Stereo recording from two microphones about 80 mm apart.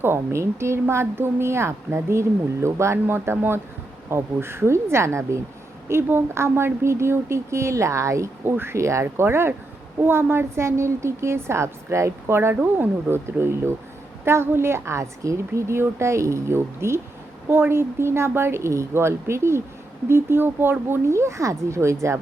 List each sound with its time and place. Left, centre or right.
0.0 s a woman's voice: right